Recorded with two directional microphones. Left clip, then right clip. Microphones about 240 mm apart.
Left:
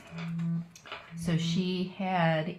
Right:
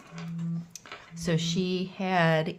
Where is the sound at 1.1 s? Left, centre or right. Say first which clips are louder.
Right 5 dB; right.